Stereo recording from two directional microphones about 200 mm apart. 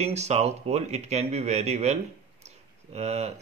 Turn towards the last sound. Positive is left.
turn(degrees=-35)  # may be behind; listen again after turning